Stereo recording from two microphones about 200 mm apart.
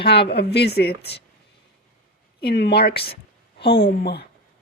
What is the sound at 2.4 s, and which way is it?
A woman's voice, 55° left (ahead or behind).